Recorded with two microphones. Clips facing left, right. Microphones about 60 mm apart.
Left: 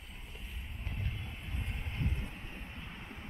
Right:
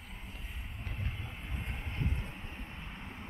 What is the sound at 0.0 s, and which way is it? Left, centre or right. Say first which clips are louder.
Vehicle: right 2 dB; right.